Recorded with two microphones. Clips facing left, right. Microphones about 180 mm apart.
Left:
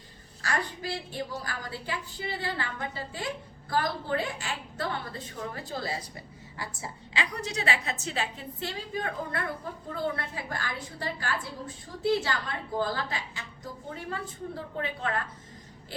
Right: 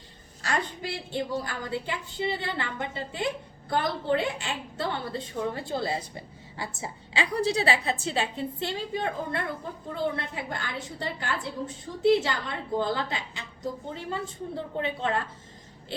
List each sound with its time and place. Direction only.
0.4 s a woman's voice: 25° right (ahead or behind)